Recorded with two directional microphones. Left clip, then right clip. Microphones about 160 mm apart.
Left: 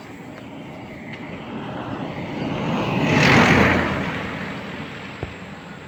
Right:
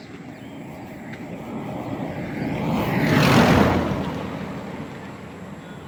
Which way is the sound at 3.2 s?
90° right.